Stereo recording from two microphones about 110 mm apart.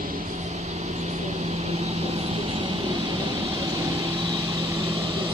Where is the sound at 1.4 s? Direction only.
75° right (ahead or behind).